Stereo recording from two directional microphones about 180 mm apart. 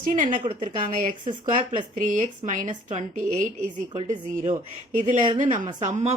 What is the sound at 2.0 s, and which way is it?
A woman's voice, 45° right (ahead or behind).